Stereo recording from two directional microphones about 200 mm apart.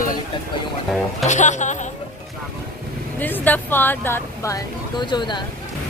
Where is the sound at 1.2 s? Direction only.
35° left (ahead or behind).